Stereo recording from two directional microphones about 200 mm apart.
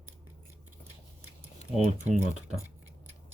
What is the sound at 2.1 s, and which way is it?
Speech, 5° right (ahead or behind).